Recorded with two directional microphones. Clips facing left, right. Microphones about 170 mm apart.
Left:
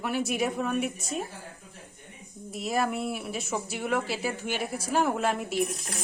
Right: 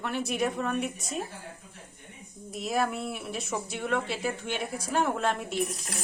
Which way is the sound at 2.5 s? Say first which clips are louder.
Left 1 dB; centre (ahead or behind).